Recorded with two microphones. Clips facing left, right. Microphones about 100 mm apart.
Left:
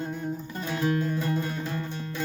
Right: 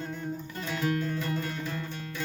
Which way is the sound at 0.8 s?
30° left (ahead or behind).